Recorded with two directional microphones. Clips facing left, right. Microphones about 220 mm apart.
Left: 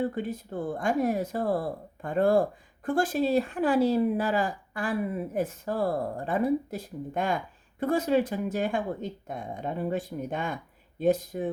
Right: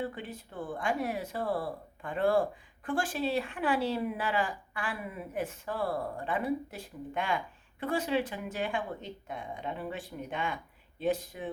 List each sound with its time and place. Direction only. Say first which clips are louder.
0.0 s speech: left 8 dB; 40° left (ahead or behind)